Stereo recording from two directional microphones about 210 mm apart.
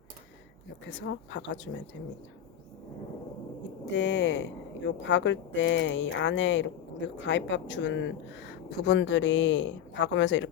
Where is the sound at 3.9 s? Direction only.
60° left (ahead or behind).